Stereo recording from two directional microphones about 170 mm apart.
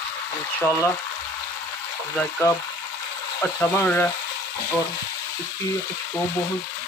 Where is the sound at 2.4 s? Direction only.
15° left (ahead or behind).